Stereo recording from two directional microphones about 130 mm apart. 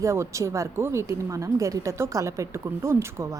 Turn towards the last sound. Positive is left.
turn(degrees=-20)  # may be behind; listen again after turning